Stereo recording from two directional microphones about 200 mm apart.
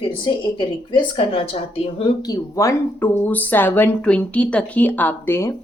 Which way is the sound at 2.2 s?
15° left (ahead or behind).